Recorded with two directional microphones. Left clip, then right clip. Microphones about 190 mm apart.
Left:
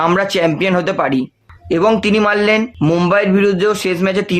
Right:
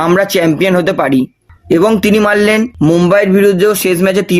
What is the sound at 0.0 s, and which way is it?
A man's voice, 40° right (ahead or behind).